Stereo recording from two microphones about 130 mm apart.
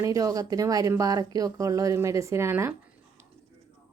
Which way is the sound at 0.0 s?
25° right (ahead or behind).